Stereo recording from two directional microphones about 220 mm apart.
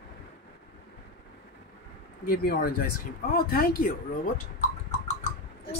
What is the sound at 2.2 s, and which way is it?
Speech, 45° left (ahead or behind).